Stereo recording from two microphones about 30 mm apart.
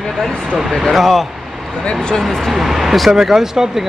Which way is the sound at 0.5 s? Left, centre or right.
Centre.